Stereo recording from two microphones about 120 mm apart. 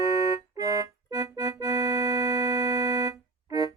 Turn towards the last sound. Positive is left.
turn(degrees=-30)  # may be behind; listen again after turning